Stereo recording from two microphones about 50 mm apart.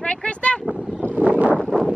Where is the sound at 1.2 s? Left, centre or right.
Right.